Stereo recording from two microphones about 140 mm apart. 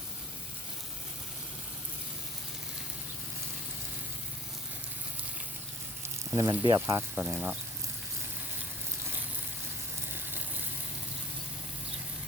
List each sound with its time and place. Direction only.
6.3 s speech: 25° right (ahead or behind)